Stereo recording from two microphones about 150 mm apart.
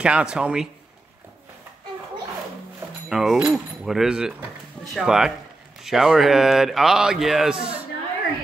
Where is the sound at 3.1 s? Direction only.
5° right (ahead or behind).